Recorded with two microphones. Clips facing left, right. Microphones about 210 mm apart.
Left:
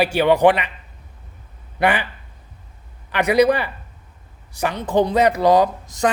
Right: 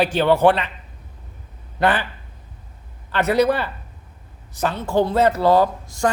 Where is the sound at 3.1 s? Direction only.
15° left (ahead or behind).